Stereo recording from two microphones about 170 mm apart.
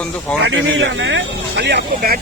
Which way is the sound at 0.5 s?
90° right.